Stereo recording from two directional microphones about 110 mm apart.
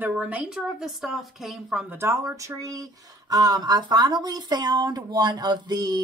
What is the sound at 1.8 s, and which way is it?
Speech, 20° right (ahead or behind).